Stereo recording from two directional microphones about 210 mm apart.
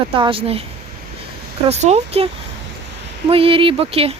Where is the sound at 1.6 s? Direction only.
30° right (ahead or behind).